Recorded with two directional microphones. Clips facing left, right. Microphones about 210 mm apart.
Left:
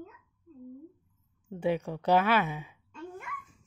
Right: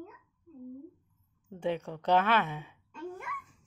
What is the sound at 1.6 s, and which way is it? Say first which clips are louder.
Speech: left 3 dB; 10° left (ahead or behind).